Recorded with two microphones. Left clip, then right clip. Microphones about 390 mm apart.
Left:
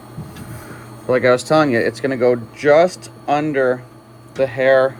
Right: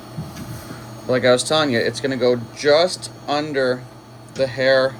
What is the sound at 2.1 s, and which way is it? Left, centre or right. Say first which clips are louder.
Speech: left 3 dB; left.